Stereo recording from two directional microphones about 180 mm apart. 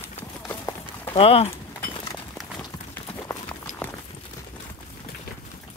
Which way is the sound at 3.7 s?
40° left (ahead or behind).